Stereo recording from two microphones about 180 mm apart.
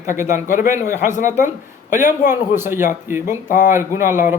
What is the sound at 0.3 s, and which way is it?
A man's voice, 45° left (ahead or behind).